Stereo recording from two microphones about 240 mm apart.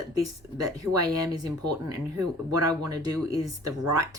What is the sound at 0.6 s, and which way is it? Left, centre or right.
Speech, centre.